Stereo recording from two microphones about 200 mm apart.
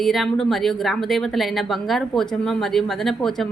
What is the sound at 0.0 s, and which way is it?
Speech, centre (ahead or behind).